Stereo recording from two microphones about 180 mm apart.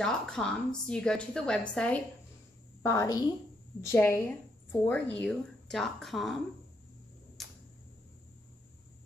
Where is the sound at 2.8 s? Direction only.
15° left (ahead or behind); by 6.4 s centre (ahead or behind).